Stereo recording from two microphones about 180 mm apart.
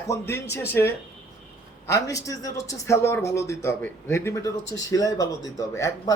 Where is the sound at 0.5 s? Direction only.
15° left (ahead or behind).